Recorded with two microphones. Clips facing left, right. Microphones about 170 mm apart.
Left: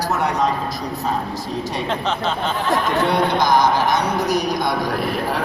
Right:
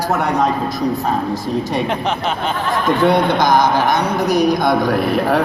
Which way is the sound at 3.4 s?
55° right (ahead or behind).